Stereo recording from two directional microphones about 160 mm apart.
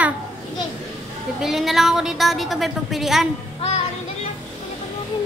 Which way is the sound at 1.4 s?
Centre (ahead or behind).